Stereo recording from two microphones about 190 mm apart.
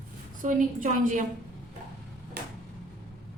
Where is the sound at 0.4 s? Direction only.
40° right (ahead or behind).